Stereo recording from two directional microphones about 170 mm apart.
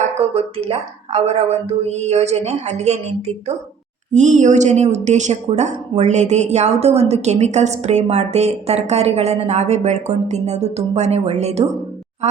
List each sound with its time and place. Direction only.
0.1 s speech: 40° right (ahead or behind)